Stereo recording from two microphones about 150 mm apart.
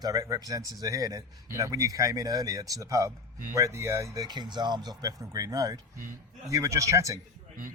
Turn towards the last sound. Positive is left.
turn(degrees=-20)  # may be behind; listen again after turning